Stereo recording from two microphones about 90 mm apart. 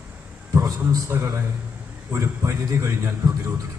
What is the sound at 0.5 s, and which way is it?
A man's voice, 30° right (ahead or behind).